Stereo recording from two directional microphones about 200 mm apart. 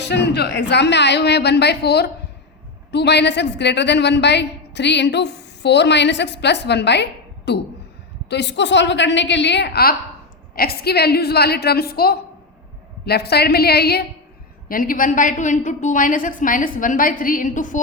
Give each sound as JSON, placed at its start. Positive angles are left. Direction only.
{"t": 0.0, "sound": "a woman's voice", "side_deg": 60}